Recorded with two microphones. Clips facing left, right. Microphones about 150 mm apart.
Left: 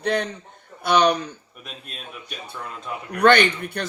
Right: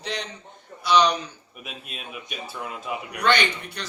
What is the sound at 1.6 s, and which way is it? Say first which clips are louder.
Speech: right 2 dB; 5° right (ahead or behind).